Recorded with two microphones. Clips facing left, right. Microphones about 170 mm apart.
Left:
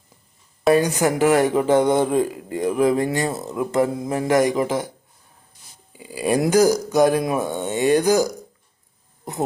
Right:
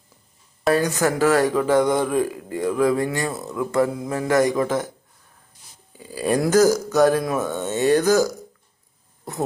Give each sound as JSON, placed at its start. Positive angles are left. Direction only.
{"t": 0.7, "sound": "speech", "side_deg": 20}
{"t": 5.9, "sound": "speech", "side_deg": 15}